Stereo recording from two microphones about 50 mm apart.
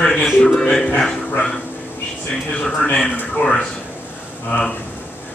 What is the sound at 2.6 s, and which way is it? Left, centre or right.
Speech, left.